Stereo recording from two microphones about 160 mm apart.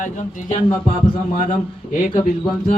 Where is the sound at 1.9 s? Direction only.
50° left (ahead or behind).